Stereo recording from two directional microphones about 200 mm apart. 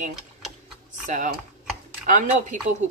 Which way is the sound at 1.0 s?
40° right (ahead or behind).